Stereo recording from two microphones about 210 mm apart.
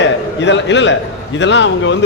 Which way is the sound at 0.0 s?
60° left (ahead or behind).